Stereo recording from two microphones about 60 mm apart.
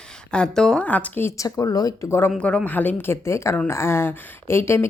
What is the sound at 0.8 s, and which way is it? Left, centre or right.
Speech, left.